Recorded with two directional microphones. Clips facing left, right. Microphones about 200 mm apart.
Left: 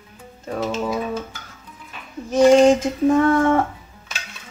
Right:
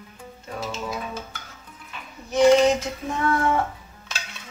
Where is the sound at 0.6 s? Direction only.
50° left (ahead or behind).